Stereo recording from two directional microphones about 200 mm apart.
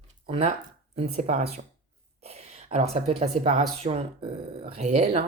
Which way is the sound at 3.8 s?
30° right (ahead or behind).